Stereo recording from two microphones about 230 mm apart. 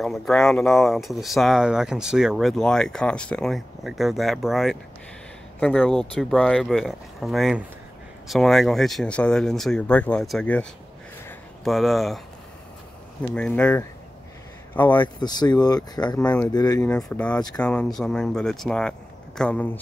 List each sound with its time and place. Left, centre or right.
0.0 s speech: centre
11.2 s a sound: centre
13.2 s speech: centre
15.1 s speech: centre
16.9 s speech: centre